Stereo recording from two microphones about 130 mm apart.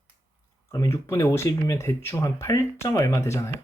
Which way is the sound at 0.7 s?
25° left (ahead or behind).